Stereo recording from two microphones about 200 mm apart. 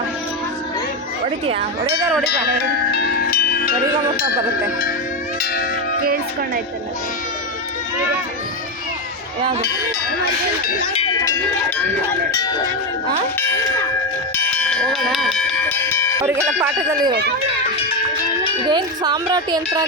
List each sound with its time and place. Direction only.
2.9 s music: 50° left (ahead or behind)
11.0 s cowbell: 20° left (ahead or behind)
13.4 s clang: 10° left (ahead or behind)
14.3 s bell: 10° left (ahead or behind)
16.2 s speech: 10° right (ahead or behind)
18.6 s a woman's voice: 20° right (ahead or behind)